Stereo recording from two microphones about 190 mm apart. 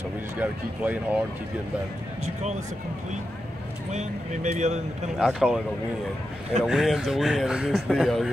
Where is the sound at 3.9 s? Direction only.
40° right (ahead or behind).